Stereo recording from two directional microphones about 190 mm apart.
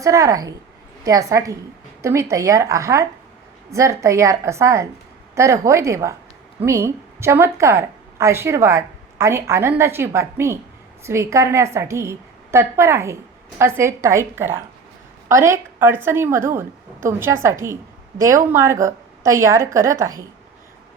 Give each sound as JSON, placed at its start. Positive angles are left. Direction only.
{"t": 0.0, "sound": "a woman's voice", "side_deg": -15}